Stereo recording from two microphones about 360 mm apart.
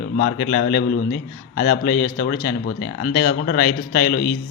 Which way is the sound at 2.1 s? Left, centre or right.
Left.